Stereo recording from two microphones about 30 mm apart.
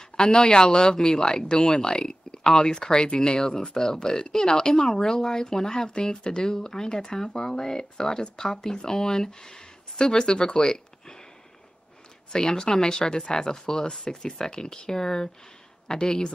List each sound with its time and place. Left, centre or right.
0.0 s speech: left
1.6 s speech: centre
1.9 s speech: left
12.5 s speech: left